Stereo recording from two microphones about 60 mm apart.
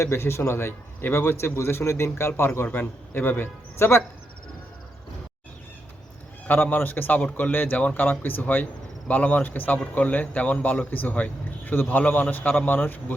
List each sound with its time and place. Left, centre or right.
0.0 s speech: left
2.7 s a man's voice: left
6.5 s a man's voice: left